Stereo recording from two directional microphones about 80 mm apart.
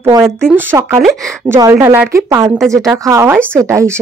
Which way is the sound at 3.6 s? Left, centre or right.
Right.